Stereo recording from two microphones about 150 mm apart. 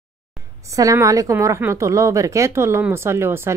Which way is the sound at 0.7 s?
20° right (ahead or behind).